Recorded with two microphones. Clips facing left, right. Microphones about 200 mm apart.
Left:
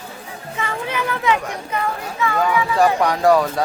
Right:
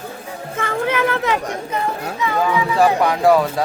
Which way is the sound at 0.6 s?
50° right (ahead or behind).